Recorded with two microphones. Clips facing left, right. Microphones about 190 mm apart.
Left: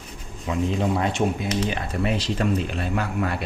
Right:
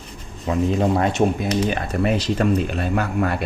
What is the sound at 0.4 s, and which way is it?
Speech, 45° right (ahead or behind).